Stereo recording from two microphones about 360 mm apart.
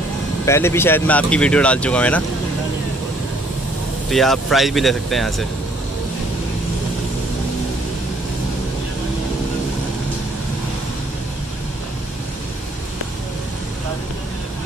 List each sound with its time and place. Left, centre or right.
0.5 s speech: centre
4.1 s speech: centre